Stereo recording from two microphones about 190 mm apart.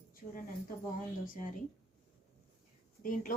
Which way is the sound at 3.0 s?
45° left (ahead or behind).